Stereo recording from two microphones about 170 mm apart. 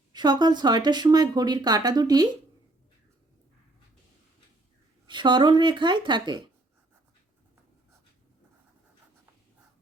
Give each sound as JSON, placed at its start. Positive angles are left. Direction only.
{"t": 0.1, "sound": "speech", "side_deg": -25}
{"t": 5.0, "sound": "speech", "side_deg": -25}